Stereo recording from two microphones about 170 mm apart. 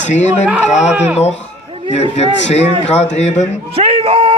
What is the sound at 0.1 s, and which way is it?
Speech, 45° left (ahead or behind).